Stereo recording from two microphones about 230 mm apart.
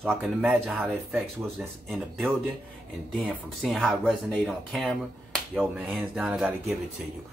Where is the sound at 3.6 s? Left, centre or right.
Centre.